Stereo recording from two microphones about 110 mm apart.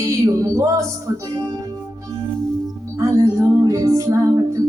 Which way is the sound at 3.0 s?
30° right (ahead or behind).